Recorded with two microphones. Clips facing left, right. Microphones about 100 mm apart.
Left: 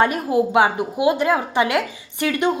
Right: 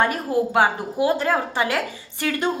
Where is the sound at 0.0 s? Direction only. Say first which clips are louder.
Left 3 dB; 20° left (ahead or behind).